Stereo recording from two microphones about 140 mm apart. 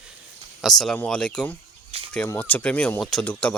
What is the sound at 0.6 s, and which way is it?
Speech, centre (ahead or behind).